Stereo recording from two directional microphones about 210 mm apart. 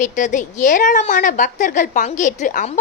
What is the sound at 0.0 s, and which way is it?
A woman's voice, 35° left (ahead or behind).